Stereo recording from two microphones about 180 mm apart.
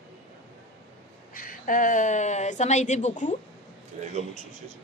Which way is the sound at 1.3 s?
50° left (ahead or behind).